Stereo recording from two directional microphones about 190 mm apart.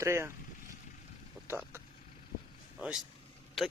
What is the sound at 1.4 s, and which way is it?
Speech, 15° right (ahead or behind).